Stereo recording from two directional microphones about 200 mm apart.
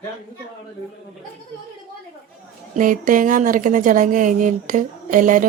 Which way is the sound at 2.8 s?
40° right (ahead or behind).